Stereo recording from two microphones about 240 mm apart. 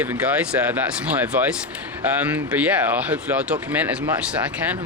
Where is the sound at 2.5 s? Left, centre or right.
Centre.